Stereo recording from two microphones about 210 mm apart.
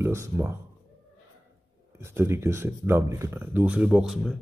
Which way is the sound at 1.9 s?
10° right (ahead or behind).